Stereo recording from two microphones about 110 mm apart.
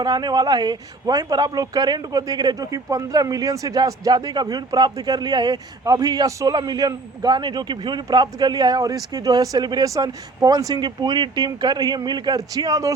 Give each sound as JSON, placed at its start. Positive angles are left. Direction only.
{"t": 0.0, "sound": "speech", "side_deg": -40}